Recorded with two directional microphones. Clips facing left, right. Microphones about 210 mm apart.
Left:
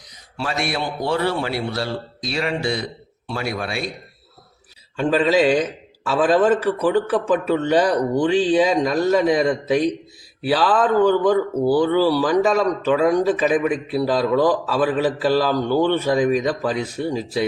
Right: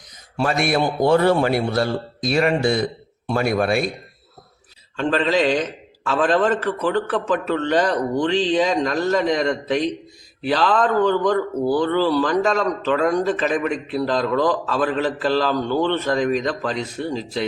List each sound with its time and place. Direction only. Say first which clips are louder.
0.3 s a man's voice: right 5 dB; 50° right (ahead or behind)
4.9 s speech: left 2 dB; 10° left (ahead or behind)